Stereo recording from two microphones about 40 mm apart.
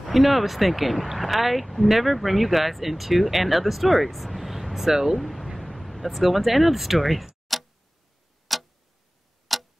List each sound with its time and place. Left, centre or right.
0.0 s speech: centre
5.2 s speech: centre
7.5 s tick-tock: centre
8.5 s clock: centre